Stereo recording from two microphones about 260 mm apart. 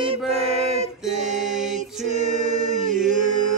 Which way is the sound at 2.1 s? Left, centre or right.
Right.